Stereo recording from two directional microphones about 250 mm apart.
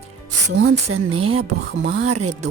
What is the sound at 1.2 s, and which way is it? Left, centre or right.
Speech, right.